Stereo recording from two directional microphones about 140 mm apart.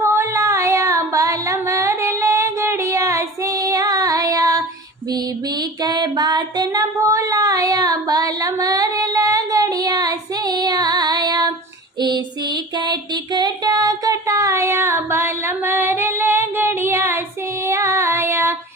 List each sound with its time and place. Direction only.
0.0 s female singing: 20° right (ahead or behind)
5.1 s music: 30° right (ahead or behind)
11.9 s a sound: 30° right (ahead or behind)
17.7 s female singing: 20° right (ahead or behind)